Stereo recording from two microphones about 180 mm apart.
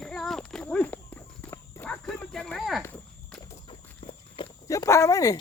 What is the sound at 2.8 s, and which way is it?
Walk, 5° left (ahead or behind).